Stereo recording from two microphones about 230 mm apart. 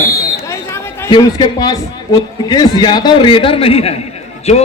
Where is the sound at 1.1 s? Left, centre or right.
Centre.